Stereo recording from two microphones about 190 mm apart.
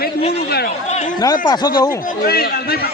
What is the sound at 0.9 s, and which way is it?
Speech, 35° left (ahead or behind).